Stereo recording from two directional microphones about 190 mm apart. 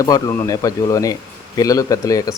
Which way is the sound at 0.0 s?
15° left (ahead or behind).